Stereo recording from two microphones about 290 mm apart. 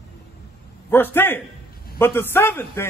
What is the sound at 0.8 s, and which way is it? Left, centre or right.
A man's voice, centre.